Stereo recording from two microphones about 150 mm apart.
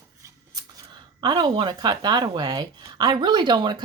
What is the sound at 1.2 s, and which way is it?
Speech, 30° right (ahead or behind).